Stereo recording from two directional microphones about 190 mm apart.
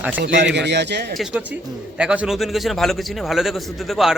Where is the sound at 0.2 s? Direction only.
65° right (ahead or behind).